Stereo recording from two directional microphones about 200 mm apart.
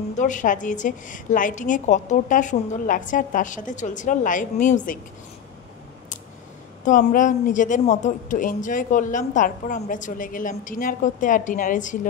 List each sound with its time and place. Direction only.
0.2 s speech: 40° left (ahead or behind)
6.8 s speech: 40° left (ahead or behind)